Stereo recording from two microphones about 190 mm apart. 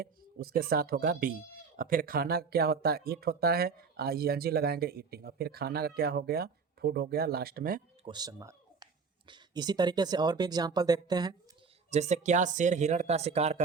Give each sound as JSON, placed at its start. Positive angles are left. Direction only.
{"t": 0.0, "sound": "speech", "side_deg": -50}
{"t": 8.0, "sound": "speech", "side_deg": -20}
{"t": 11.9, "sound": "speech", "side_deg": -35}